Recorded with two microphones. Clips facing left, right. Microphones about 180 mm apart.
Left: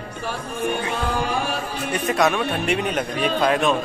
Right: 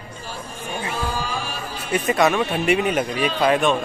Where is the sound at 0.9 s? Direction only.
65° left (ahead or behind).